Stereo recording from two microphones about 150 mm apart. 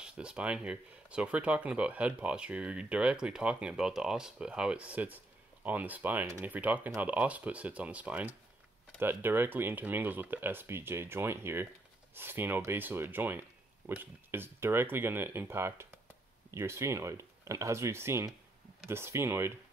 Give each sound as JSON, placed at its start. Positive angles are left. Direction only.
{"t": 0.0, "sound": "speech", "side_deg": -5}